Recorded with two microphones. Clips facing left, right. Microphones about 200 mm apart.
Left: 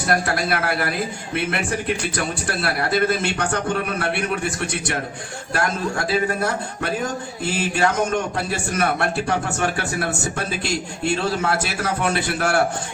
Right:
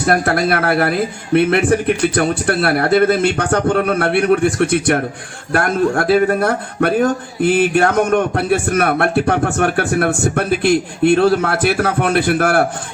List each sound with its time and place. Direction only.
0.1 s a man's voice: 55° right (ahead or behind)